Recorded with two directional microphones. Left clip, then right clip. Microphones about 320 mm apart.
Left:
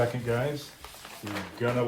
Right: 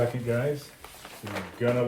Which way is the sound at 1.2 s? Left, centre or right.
Centre.